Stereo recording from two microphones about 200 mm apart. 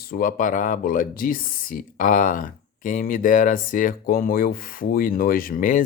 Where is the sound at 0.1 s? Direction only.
45° left (ahead or behind).